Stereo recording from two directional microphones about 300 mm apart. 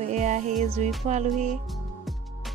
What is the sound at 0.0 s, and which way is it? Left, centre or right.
Music, right.